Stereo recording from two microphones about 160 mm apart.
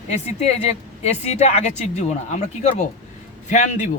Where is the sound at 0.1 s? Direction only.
45° left (ahead or behind).